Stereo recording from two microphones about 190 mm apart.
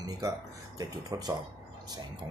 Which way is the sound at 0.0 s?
20° right (ahead or behind).